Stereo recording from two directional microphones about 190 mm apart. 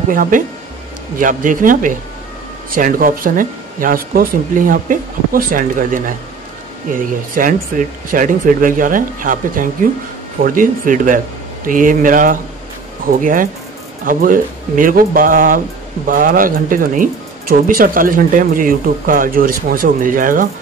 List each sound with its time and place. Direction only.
0.1 s speech: 45° right (ahead or behind)